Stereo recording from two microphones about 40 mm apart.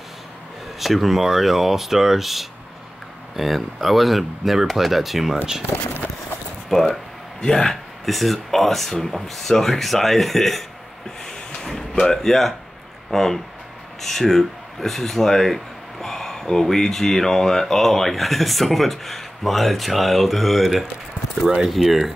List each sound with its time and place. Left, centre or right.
0.7 s speech: centre
6.7 s speech: centre
7.4 s speech: centre
8.0 s speech: centre
11.2 s a sound: centre
13.1 s speech: centre